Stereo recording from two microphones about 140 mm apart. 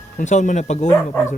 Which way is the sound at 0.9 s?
20° left (ahead or behind).